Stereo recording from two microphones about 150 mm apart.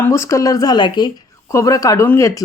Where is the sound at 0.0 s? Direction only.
20° left (ahead or behind).